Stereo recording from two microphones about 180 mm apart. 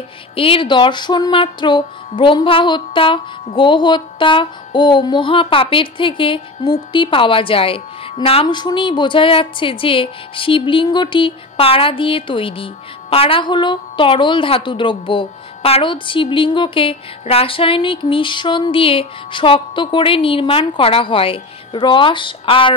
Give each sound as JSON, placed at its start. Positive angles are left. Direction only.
{"t": 0.4, "sound": "music", "side_deg": 30}